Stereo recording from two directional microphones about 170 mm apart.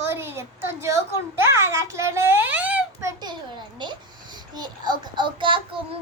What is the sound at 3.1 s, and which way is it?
A child's voice, 25° right (ahead or behind).